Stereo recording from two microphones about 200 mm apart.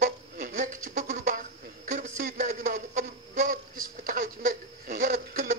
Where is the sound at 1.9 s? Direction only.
45° right (ahead or behind).